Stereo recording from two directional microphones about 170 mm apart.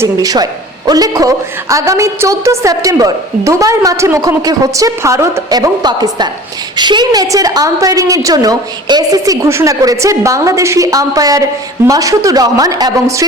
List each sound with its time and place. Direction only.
0.0 s a woman's voice: 20° right (ahead or behind)